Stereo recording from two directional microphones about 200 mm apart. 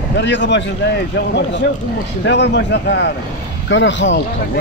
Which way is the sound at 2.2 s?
60° left (ahead or behind).